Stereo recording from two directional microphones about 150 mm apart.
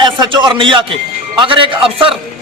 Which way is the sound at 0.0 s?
30° right (ahead or behind).